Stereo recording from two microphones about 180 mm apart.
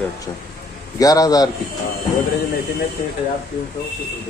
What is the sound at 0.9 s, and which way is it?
Speech, 20° left (ahead or behind).